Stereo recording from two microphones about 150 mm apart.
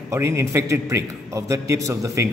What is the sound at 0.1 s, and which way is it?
A man's voice, 20° right (ahead or behind).